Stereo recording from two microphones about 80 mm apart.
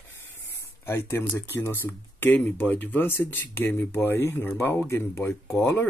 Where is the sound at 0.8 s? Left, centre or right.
Left.